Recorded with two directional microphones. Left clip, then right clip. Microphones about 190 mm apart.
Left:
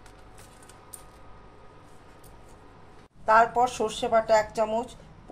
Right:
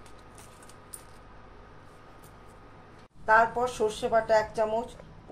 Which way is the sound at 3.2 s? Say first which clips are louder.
Left 3 dB; 65° left (ahead or behind).